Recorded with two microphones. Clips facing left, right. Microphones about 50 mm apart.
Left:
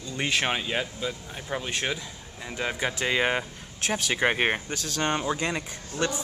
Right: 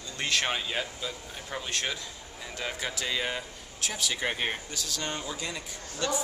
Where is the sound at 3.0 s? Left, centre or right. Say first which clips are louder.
Left 8 dB; left.